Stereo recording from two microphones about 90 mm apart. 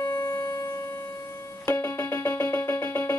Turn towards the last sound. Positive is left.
turn(degrees=25)  # may be behind; listen again after turning